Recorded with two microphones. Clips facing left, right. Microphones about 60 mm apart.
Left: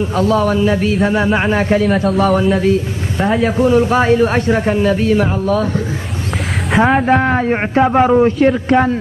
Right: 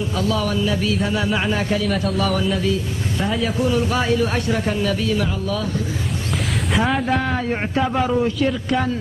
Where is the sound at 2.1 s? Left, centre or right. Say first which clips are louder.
Left 7 dB; left.